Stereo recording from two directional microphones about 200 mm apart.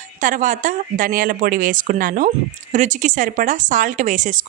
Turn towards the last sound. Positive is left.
turn(degrees=-40)  # may be behind; listen again after turning